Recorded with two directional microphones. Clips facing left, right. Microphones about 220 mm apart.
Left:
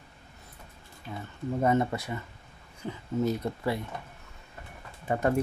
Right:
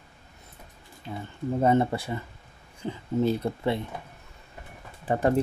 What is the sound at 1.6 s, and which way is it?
Speech, 30° right (ahead or behind).